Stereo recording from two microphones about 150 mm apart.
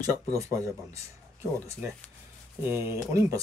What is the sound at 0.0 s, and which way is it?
Speech, 20° right (ahead or behind).